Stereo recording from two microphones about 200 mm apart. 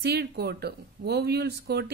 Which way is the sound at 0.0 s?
55° right (ahead or behind).